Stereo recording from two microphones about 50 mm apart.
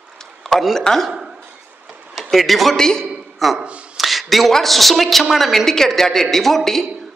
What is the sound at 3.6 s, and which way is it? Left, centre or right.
Speech, right.